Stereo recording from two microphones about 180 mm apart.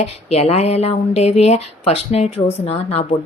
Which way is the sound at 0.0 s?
35° left (ahead or behind).